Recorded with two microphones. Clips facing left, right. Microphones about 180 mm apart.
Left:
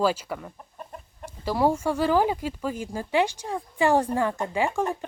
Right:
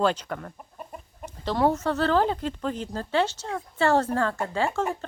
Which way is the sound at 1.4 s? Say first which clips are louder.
Even; 10° left (ahead or behind).